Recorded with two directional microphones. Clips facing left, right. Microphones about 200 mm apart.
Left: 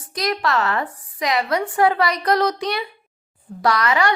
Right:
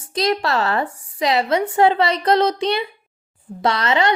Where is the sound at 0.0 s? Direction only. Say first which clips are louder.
Right 3 dB; 25° right (ahead or behind).